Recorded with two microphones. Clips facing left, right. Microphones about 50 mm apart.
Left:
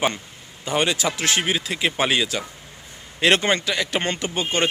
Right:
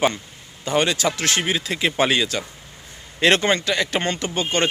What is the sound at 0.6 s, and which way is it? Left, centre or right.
A man's voice, centre.